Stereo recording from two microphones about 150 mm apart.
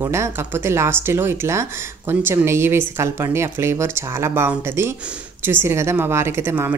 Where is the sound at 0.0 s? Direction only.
20° right (ahead or behind).